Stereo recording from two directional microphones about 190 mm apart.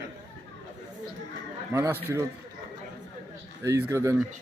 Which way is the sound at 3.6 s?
15° right (ahead or behind).